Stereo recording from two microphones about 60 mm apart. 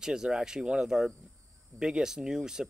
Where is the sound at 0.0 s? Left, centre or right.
Centre.